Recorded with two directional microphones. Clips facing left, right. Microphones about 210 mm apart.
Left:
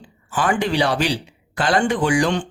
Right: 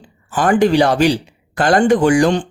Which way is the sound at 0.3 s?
45° right (ahead or behind).